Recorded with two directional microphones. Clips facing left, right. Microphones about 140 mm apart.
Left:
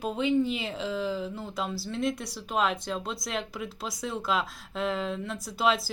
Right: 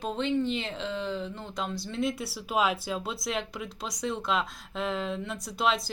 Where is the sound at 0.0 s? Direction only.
5° left (ahead or behind).